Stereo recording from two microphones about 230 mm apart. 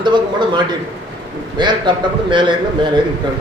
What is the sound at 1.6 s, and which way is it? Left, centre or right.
A man's voice, centre.